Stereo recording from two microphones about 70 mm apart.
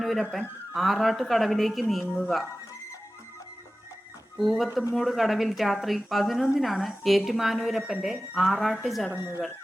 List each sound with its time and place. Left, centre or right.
0.0 s a woman's voice: centre
4.4 s a woman's voice: centre
9.1 s speech: right